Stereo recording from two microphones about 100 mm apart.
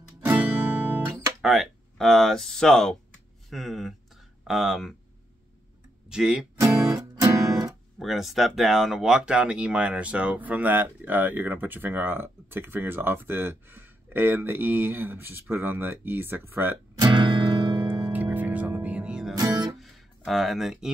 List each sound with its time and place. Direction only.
0.2 s music: 20° right (ahead or behind)
1.4 s speech: centre (ahead or behind)
6.0 s speech: 5° right (ahead or behind)
6.6 s music: 35° right (ahead or behind)
8.0 s speech: centre (ahead or behind); by 16.7 s 20° right (ahead or behind)
17.0 s music: 50° right (ahead or behind)
18.1 s music: 15° right (ahead or behind)
19.3 s music: 45° right (ahead or behind)
19.8 s a sound: centre (ahead or behind)